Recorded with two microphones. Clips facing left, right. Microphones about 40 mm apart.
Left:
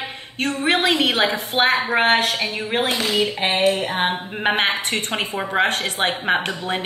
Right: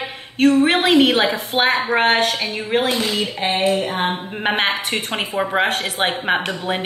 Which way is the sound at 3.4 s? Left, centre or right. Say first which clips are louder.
Right 1 dB; left.